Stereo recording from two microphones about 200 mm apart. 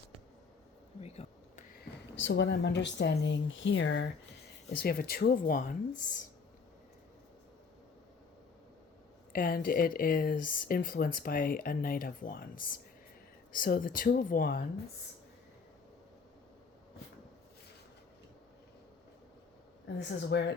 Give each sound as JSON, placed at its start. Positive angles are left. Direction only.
{"t": 1.0, "sound": "a sound", "side_deg": 30}
{"t": 2.1, "sound": "speech", "side_deg": 70}
{"t": 4.8, "sound": "speech", "side_deg": 50}
{"t": 9.3, "sound": "speech", "side_deg": 45}
{"t": 20.0, "sound": "speech", "side_deg": 60}